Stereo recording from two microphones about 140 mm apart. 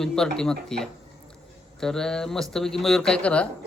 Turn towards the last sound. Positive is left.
turn(degrees=10)  # may be behind; listen again after turning